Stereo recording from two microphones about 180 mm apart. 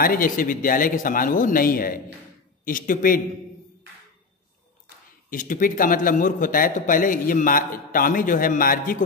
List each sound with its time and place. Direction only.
0.0 s a man's voice: 50° left (ahead or behind)
5.3 s a man's voice: 50° left (ahead or behind)